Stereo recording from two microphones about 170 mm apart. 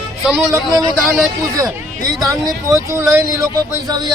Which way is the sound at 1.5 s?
20° right (ahead or behind).